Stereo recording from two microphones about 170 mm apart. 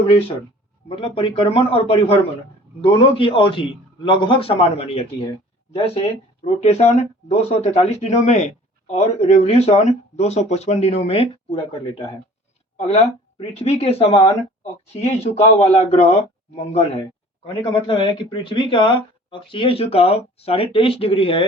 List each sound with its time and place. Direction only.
0.9 s speech: 30° left (ahead or behind)
13.5 s speech: 40° left (ahead or behind)